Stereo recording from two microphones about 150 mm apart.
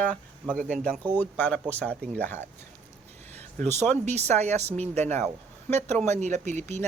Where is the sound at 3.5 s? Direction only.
50° right (ahead or behind).